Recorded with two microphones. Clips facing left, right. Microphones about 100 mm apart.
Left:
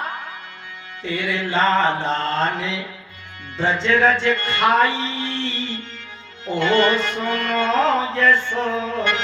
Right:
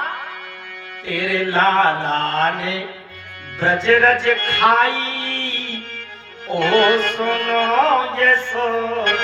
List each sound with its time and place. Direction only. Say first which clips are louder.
1.0 s music: right 3 dB; 50° right (ahead or behind)